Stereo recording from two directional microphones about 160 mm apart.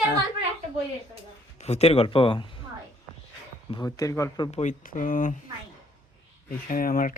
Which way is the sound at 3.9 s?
20° left (ahead or behind).